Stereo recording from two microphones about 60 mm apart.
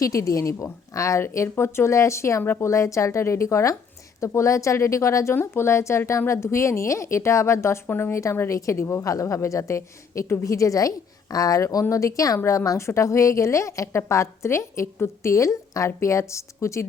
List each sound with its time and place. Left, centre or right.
0.0 s a woman's voice: left
5.3 s a woman's voice: left
7.9 s speech: left
8.1 s a woman's voice: left
8.8 s a woman's voice: left
9.0 s a woman's voice: left